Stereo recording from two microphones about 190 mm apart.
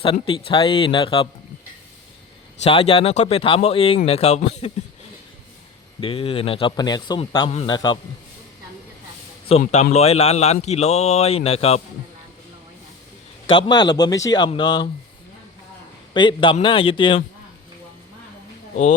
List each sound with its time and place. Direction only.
0.0 s a man's voice: 25° left (ahead or behind)
2.6 s speech: 30° left (ahead or behind)
6.0 s a man's voice: 30° left (ahead or behind)
9.5 s speech: 30° left (ahead or behind)
13.5 s a man's voice: 25° left (ahead or behind)
16.1 s a man's voice: 25° left (ahead or behind)